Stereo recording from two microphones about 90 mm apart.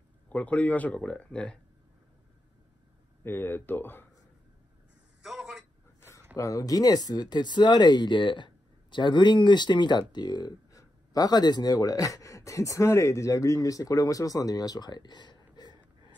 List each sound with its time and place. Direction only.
0.3 s speech: 15° left (ahead or behind)
3.3 s speech: 25° left (ahead or behind)
5.2 s a sound: 5° right (ahead or behind)
6.3 s speech: 40° left (ahead or behind)